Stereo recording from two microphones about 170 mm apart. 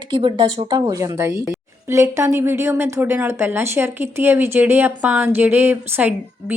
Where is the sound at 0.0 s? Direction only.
30° right (ahead or behind).